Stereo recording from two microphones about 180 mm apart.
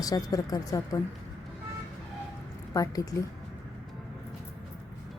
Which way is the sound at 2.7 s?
20° left (ahead or behind).